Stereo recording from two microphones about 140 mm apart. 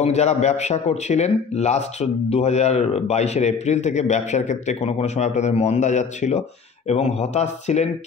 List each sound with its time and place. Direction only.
0.0 s a man's voice: 50° left (ahead or behind)